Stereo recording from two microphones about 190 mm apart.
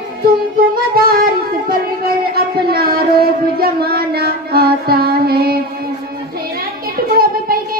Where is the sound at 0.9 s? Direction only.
50° right (ahead or behind).